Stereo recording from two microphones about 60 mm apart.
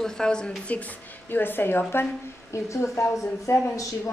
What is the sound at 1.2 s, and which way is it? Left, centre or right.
Speech, left.